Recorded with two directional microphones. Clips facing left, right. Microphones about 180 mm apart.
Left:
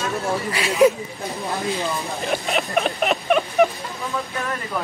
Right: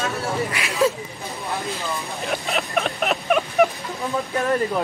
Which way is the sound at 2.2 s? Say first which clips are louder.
Left 2 dB; centre (ahead or behind).